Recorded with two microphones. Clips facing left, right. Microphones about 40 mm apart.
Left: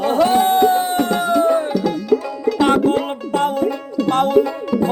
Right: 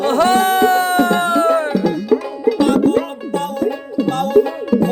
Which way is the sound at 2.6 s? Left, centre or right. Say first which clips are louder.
Left 2 dB; left.